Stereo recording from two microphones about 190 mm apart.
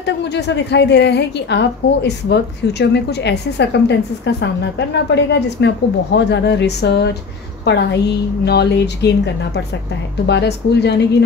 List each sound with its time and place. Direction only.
0.0 s a woman's voice: 65° left (ahead or behind)